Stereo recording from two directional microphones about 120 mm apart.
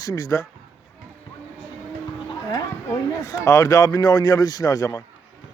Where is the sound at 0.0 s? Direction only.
30° left (ahead or behind).